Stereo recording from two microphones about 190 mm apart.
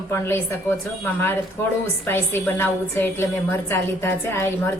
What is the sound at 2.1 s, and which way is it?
A woman's voice, 10° left (ahead or behind).